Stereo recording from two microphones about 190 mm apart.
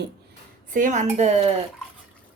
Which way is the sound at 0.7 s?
40° right (ahead or behind).